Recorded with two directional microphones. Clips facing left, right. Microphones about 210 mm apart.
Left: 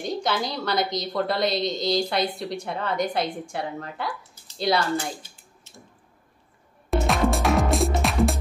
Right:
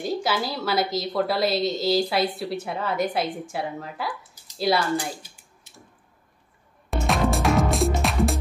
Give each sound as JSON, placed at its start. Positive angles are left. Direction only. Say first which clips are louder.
{"t": 0.0, "sound": "a woman's voice", "louder": "right 1 dB", "side_deg": -5}
{"t": 5.0, "sound": "a sound", "louder": "even", "side_deg": -10}
{"t": 6.9, "sound": "music", "louder": "left 1 dB", "side_deg": 0}